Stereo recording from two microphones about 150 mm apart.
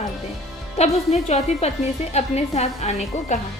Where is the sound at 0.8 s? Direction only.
45° left (ahead or behind).